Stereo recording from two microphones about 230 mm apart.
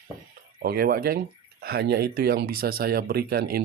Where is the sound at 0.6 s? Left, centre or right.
Right.